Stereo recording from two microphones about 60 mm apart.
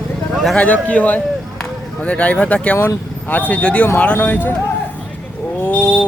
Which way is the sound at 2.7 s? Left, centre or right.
Left.